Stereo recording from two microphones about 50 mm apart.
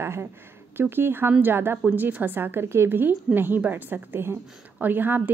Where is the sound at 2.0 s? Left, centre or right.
Right.